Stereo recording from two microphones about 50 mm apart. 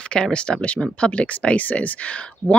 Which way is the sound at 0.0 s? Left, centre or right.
Centre.